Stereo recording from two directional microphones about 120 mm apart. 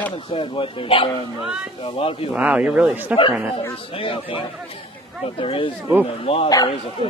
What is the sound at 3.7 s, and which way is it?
A man's voice, 50° left (ahead or behind).